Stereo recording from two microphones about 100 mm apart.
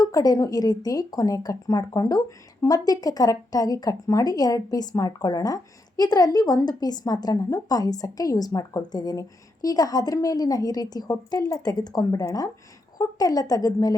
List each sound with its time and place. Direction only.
0.0 s speech: 40° left (ahead or behind)